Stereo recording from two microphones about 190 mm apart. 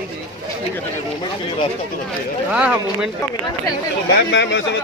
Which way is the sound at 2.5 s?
5° right (ahead or behind).